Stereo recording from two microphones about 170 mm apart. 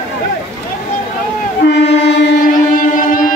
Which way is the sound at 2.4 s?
50° left (ahead or behind).